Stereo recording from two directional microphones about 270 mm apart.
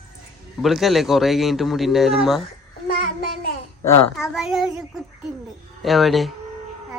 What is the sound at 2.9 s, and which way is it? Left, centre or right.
Child singing, left.